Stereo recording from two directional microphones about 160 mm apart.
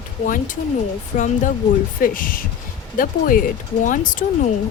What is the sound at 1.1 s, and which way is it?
Speech, 50° left (ahead or behind).